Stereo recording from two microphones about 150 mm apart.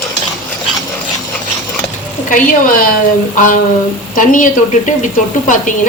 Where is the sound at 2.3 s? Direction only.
65° left (ahead or behind).